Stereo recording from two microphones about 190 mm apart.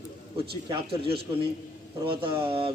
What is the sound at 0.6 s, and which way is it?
A man's voice, 30° right (ahead or behind).